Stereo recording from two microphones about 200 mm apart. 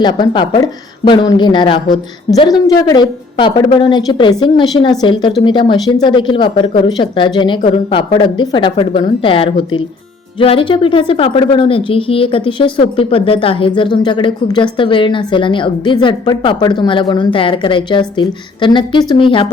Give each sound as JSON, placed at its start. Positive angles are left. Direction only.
{"t": 0.0, "sound": "a woman's voice", "side_deg": 20}